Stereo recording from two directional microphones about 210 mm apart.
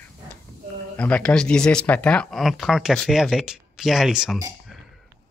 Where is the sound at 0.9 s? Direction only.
5° left (ahead or behind).